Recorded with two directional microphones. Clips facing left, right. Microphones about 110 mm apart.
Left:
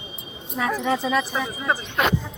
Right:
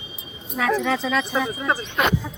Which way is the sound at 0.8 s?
15° left (ahead or behind).